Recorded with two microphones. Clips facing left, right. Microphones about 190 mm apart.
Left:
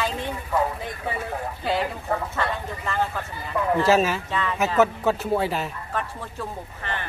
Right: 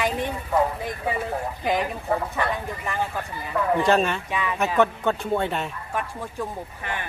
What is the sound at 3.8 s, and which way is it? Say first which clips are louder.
Speech: left 3 dB; 5° left (ahead or behind).